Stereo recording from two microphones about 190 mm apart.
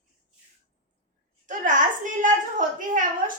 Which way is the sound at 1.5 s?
40° right (ahead or behind).